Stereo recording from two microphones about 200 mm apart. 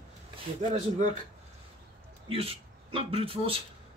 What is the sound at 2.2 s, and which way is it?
Speech, 30° right (ahead or behind).